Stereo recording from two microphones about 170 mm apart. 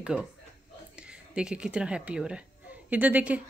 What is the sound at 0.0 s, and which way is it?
Speech, 5° right (ahead or behind).